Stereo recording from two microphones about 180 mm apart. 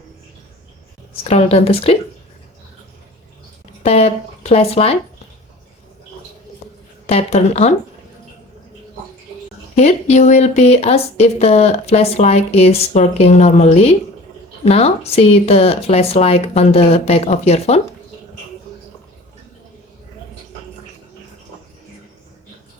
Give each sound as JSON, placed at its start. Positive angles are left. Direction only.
{"t": 1.2, "sound": "speech", "side_deg": 35}
{"t": 3.8, "sound": "speech", "side_deg": 35}
{"t": 7.1, "sound": "speech", "side_deg": 35}
{"t": 9.7, "sound": "speech", "side_deg": 40}